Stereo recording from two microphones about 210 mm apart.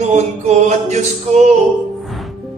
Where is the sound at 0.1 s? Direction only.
35° right (ahead or behind).